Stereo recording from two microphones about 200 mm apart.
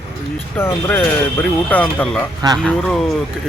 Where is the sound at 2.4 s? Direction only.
20° right (ahead or behind).